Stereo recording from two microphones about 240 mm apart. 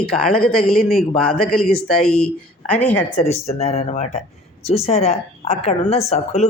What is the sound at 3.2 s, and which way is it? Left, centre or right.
A woman's voice, left.